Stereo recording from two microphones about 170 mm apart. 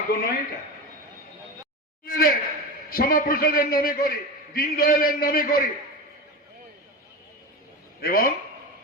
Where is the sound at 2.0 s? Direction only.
60° left (ahead or behind).